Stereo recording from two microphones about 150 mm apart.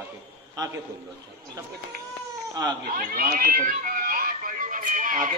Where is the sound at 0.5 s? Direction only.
25° right (ahead or behind).